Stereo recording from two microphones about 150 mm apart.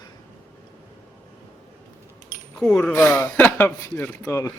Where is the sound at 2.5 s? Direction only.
5° left (ahead or behind).